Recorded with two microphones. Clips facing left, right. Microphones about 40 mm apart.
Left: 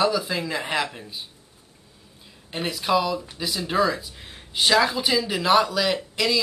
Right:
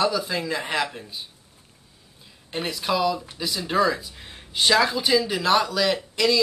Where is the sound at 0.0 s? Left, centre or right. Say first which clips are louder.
Left 1 dB; centre.